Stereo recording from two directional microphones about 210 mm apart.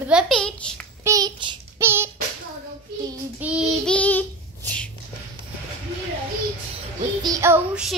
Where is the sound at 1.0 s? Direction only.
20° right (ahead or behind).